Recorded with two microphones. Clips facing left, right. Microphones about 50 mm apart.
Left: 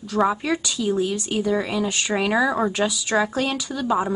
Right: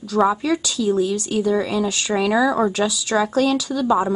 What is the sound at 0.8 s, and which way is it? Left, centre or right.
A woman's voice, left.